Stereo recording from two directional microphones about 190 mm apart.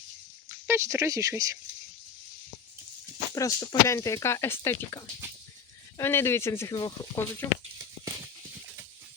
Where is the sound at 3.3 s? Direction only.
15° left (ahead or behind).